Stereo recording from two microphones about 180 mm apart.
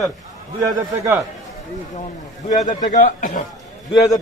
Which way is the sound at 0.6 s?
20° right (ahead or behind).